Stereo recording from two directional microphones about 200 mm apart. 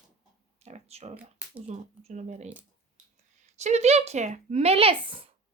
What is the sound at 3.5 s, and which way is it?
Speech, 35° right (ahead or behind).